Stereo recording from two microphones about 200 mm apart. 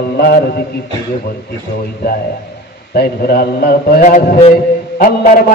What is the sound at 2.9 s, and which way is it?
A man's voice, 50° left (ahead or behind).